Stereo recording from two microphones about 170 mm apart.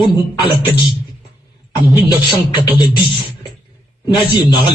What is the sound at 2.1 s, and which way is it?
Speech, 30° left (ahead or behind).